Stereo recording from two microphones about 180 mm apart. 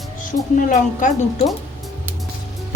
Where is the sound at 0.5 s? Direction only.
50° left (ahead or behind).